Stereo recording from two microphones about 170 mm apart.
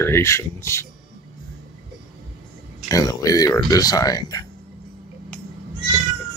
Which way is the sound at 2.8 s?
20° left (ahead or behind).